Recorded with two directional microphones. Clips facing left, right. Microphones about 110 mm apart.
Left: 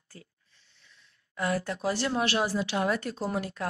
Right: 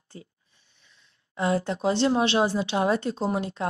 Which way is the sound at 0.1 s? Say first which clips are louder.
Right 6 dB; 25° right (ahead or behind).